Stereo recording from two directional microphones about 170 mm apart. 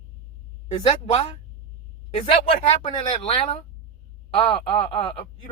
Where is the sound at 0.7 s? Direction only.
35° left (ahead or behind).